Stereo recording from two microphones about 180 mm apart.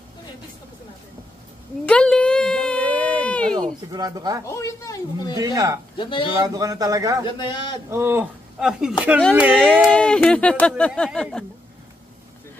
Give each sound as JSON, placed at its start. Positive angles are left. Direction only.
{"t": 1.9, "sound": "a sound", "side_deg": 5}
{"t": 3.9, "sound": "speech", "side_deg": -20}
{"t": 4.5, "sound": "speech", "side_deg": 15}
{"t": 5.4, "sound": "speech", "side_deg": -20}
{"t": 5.9, "sound": "a man's voice", "side_deg": 30}
{"t": 6.3, "sound": "speech", "side_deg": -20}
{"t": 7.2, "sound": "a man's voice", "side_deg": 25}
{"t": 7.9, "sound": "speech", "side_deg": -15}